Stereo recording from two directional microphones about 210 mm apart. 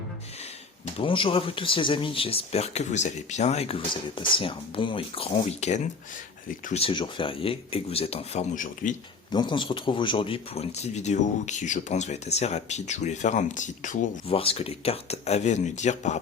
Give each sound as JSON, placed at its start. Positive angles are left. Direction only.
{"t": 0.9, "sound": "speech", "side_deg": 25}
{"t": 9.3, "sound": "speech", "side_deg": 20}